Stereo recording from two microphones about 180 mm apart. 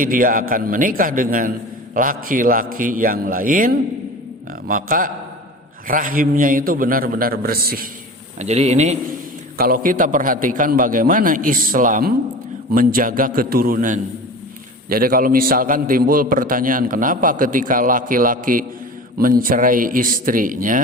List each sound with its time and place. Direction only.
0.0 s a man's voice: 50° right (ahead or behind)
8.4 s speech: 40° right (ahead or behind)
9.6 s a man's voice: 55° right (ahead or behind)